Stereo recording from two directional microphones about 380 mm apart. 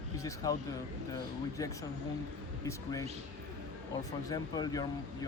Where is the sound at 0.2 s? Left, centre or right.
Centre.